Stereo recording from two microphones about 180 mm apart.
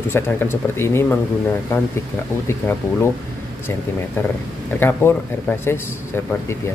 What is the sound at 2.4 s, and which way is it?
Speech, 15° left (ahead or behind).